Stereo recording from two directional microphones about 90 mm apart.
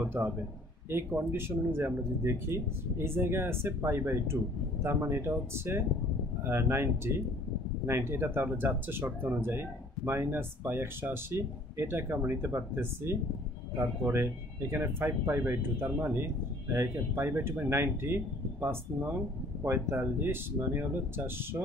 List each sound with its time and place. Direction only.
0.2 s speech: 20° right (ahead or behind)